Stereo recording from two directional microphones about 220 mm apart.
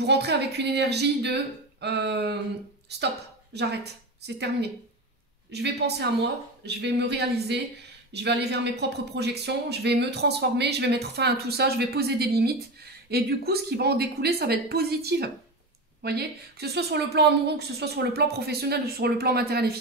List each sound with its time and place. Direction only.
0.0 s speech: 50° right (ahead or behind)
3.5 s speech: 50° right (ahead or behind)